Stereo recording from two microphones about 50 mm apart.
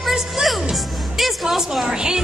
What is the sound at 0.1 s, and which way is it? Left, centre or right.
Music, centre.